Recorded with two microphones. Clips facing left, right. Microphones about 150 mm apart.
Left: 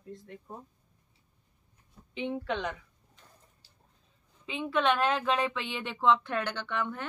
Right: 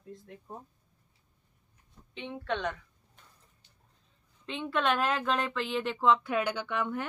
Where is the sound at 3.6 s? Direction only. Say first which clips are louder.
Left 1 dB; 35° left (ahead or behind).